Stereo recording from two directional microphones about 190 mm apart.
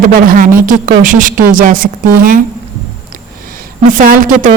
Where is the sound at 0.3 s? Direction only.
45° right (ahead or behind).